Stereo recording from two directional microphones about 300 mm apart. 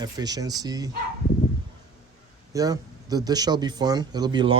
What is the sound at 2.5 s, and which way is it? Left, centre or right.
Speech, centre.